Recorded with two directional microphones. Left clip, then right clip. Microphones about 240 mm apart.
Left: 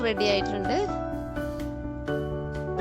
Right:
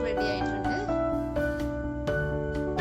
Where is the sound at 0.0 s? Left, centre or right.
Left.